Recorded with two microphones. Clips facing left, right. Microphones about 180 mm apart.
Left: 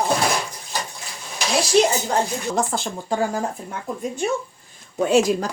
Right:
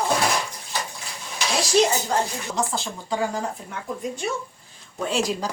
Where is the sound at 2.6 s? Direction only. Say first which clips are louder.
Left 1 dB; 55° left (ahead or behind).